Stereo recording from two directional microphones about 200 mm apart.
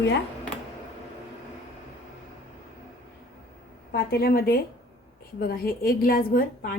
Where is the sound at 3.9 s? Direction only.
55° left (ahead or behind).